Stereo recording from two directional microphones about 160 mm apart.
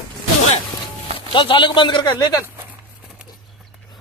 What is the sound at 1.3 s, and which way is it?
Speech, 30° left (ahead or behind).